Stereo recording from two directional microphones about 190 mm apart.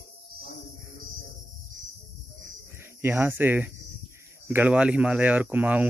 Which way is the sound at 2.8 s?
10° right (ahead or behind).